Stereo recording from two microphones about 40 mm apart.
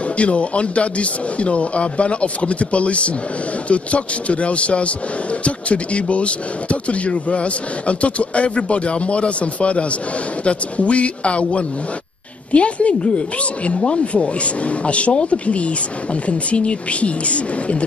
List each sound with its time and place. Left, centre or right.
0.2 s speech: left